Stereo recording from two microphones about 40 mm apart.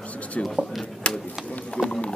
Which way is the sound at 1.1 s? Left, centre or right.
Left.